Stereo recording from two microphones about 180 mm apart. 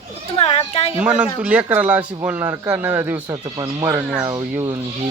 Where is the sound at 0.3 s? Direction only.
35° left (ahead or behind).